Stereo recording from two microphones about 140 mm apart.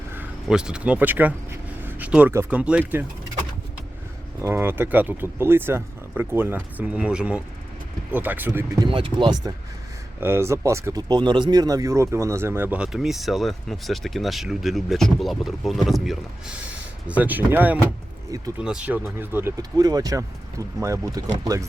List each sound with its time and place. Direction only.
0.4 s speech: 5° right (ahead or behind)
1.8 s vehicle: 10° right (ahead or behind)
2.3 s speech: 15° right (ahead or behind)
4.4 s speech: 15° right (ahead or behind)
8.8 s speech: 35° right (ahead or behind)
10.2 s speech: 15° right (ahead or behind); by 16.1 s centre (ahead or behind)
17.1 s speech: 10° right (ahead or behind)
19.5 s speech: 25° right (ahead or behind)